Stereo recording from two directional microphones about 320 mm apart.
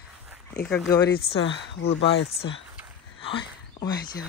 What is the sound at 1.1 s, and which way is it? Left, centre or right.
Speech, left.